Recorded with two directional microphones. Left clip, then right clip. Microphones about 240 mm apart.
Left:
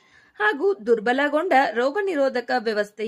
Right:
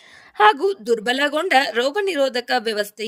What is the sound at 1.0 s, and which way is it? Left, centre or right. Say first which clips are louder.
A woman's voice: right 1 dB; right.